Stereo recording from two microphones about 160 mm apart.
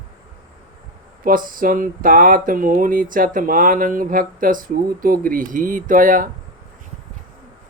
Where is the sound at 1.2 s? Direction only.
60° right (ahead or behind).